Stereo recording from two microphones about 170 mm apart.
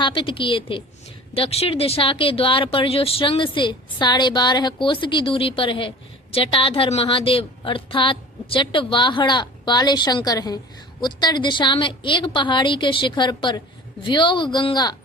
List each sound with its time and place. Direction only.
0.0 s a woman's voice: 30° left (ahead or behind)